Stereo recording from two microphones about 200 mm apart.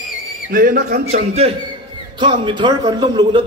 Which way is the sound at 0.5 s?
45° right (ahead or behind).